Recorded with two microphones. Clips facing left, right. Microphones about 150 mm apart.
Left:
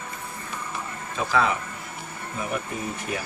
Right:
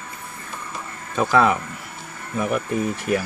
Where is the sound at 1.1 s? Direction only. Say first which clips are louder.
Right 6 dB; 55° right (ahead or behind).